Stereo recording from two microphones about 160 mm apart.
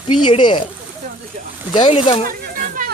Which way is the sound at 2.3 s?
60° right (ahead or behind).